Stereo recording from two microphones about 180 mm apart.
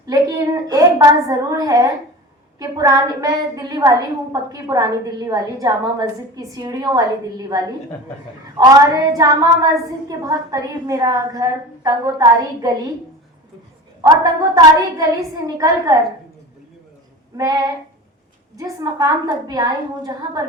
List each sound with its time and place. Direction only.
0.0 s a woman's voice: 20° right (ahead or behind)
8.5 s a woman's voice: 20° right (ahead or behind)
14.0 s a woman's voice: 20° right (ahead or behind)
18.5 s a woman's voice: 20° right (ahead or behind)